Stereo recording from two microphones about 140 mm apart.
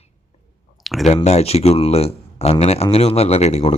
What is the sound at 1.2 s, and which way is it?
A man's voice, 50° left (ahead or behind).